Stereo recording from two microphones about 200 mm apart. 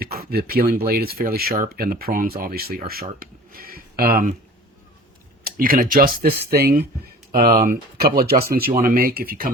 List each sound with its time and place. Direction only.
0.0 s speech: 50° right (ahead or behind)
5.4 s speech: 45° right (ahead or behind)